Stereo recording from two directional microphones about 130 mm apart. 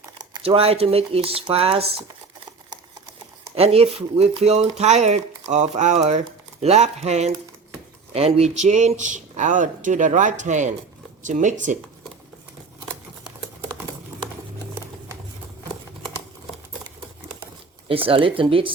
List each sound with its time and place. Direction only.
0.0 s crumpling: 30° right (ahead or behind)
0.4 s speech: 50° right (ahead or behind)
3.5 s speech: 50° right (ahead or behind); by 11.8 s 75° right (ahead or behind)
17.8 s speech: 45° right (ahead or behind)